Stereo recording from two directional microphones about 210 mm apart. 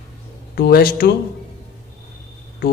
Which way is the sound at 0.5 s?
45° left (ahead or behind).